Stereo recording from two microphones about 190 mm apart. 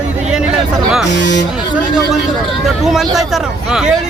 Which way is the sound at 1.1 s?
65° left (ahead or behind).